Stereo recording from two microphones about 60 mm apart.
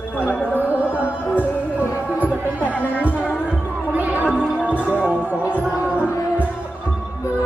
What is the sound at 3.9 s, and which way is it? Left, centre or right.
Music, right.